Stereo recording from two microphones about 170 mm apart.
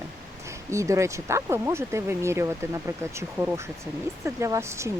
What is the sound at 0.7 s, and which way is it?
Speech, 15° right (ahead or behind).